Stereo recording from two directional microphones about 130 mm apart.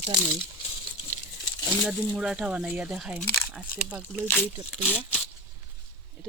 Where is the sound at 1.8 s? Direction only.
5° right (ahead or behind).